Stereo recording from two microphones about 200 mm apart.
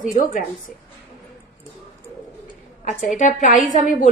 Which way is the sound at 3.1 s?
35° left (ahead or behind).